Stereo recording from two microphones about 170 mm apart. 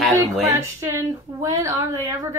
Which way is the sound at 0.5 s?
20° right (ahead or behind).